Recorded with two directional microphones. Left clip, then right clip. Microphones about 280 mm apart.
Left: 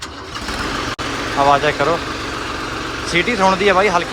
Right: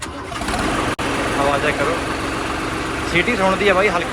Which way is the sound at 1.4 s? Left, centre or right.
Centre.